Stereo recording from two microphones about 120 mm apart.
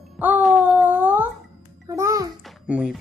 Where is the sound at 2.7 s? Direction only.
10° right (ahead or behind).